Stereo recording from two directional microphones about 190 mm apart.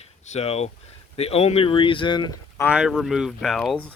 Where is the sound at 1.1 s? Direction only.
35° left (ahead or behind).